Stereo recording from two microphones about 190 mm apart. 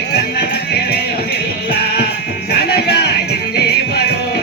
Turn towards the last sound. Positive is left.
turn(degrees=60)  # may be behind; listen again after turning